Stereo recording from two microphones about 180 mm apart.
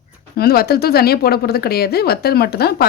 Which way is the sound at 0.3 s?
60° left (ahead or behind).